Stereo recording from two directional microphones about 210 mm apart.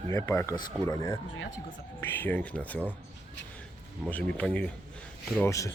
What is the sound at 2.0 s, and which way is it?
Speech, 10° left (ahead or behind).